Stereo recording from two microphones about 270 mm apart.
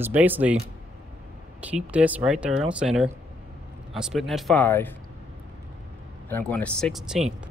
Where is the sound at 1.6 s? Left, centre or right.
Centre.